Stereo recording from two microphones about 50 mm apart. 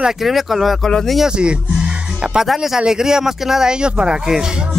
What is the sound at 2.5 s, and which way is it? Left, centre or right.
Speech, centre.